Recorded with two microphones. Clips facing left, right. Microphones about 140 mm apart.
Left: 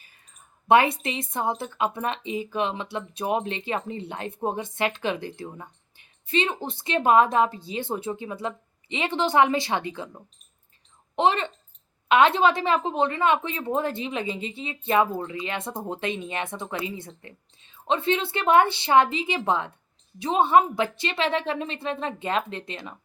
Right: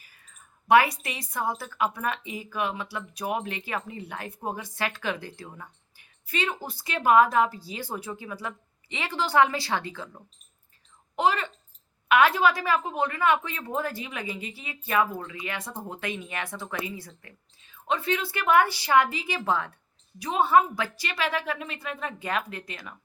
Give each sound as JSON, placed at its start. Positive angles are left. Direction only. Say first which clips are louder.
{"t": 0.7, "sound": "speech", "louder": "left 1 dB", "side_deg": 25}